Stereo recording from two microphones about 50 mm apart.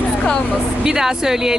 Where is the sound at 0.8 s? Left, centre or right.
Centre.